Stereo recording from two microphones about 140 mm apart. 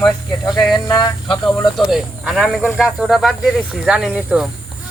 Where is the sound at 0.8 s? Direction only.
30° left (ahead or behind).